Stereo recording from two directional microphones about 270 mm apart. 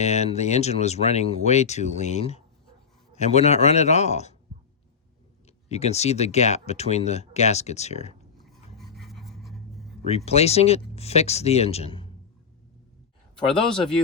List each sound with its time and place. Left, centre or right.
0.0 s speech: left
5.6 s speech: left
8.4 s filing: centre
10.1 s speech: left